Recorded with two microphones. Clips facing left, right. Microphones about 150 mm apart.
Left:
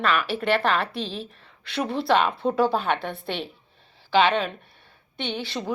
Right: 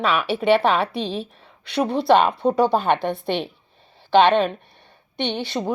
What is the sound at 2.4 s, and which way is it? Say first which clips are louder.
Speech: right 5 dB; 40° right (ahead or behind).